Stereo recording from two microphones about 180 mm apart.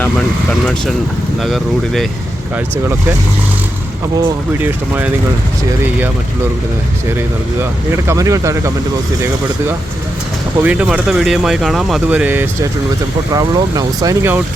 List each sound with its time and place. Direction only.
1.4 s speech: centre (ahead or behind)
4.6 s speech: 10° right (ahead or behind)
7.6 s speech: 15° right (ahead or behind)
10.6 s speech: 10° right (ahead or behind)
13.3 s speech: 20° right (ahead or behind)